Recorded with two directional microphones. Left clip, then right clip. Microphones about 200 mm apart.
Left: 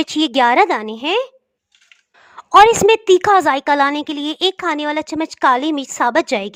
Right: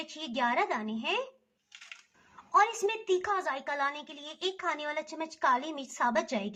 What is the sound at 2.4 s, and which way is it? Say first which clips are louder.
A woman's voice: left 17 dB; 55° left (ahead or behind).